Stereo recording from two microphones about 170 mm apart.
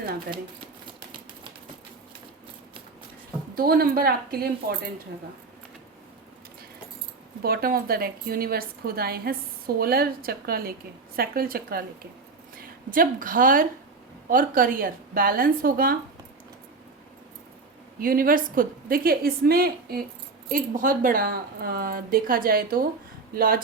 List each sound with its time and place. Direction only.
3.5 s a woman's voice: 60° right (ahead or behind)
7.4 s a woman's voice: 60° right (ahead or behind)
12.9 s a woman's voice: 55° right (ahead or behind)
18.0 s a woman's voice: 55° right (ahead or behind)